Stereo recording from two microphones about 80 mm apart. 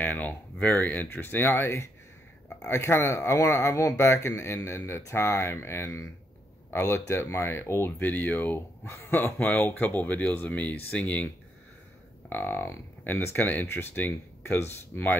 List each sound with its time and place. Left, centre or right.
0.0 s speech: left
12.3 s speech: left